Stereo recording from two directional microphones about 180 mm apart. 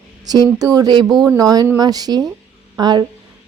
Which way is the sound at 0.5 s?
20° right (ahead or behind).